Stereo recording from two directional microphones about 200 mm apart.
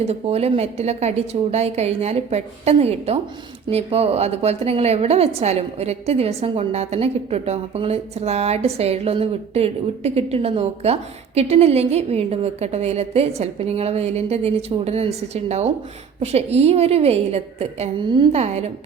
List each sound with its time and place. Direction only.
0.0 s a woman's voice: 30° right (ahead or behind)